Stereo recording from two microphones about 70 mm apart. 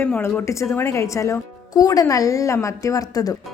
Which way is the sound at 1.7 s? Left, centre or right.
Left.